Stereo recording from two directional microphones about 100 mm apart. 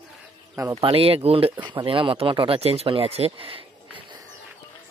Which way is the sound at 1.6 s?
55° right (ahead or behind).